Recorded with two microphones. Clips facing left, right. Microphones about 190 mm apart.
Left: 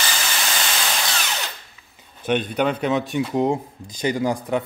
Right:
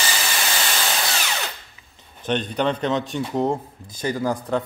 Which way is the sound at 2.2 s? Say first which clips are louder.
Left 1 dB; 10° left (ahead or behind).